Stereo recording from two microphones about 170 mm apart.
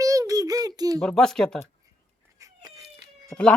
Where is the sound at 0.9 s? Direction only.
5° left (ahead or behind).